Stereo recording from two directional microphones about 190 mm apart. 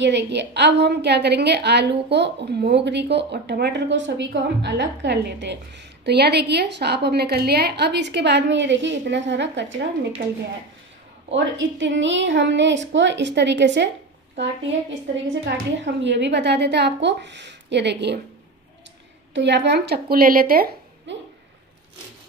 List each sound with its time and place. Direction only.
0.0 s a woman's voice: 65° right (ahead or behind)
11.3 s a woman's voice: 70° right (ahead or behind)
15.4 s a woman's voice: 70° right (ahead or behind)
19.3 s a woman's voice: 65° right (ahead or behind); by 21.2 s 50° right (ahead or behind)